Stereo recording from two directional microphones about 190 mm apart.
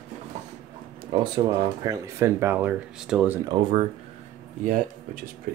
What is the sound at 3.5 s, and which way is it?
Speech, 25° right (ahead or behind).